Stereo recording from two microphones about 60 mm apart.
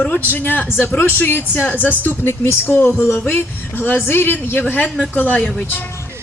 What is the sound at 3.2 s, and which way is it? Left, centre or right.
Speech, left.